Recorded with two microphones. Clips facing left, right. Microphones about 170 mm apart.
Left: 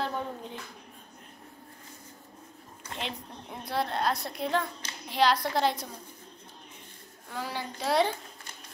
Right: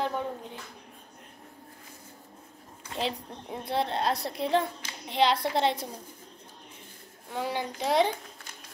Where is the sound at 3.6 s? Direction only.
25° right (ahead or behind).